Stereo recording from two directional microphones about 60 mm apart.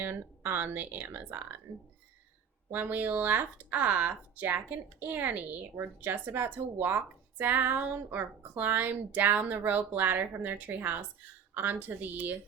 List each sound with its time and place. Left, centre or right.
0.0 s speech: right
2.7 s speech: right